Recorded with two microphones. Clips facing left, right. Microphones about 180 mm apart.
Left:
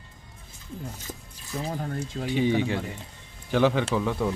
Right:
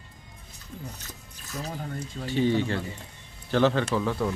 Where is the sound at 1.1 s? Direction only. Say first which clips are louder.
Left 7 dB; 50° left (ahead or behind).